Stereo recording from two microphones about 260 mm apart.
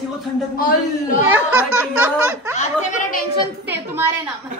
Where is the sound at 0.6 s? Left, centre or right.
Left.